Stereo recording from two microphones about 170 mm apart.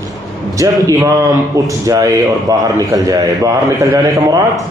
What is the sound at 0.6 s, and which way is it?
A man's voice, 20° right (ahead or behind).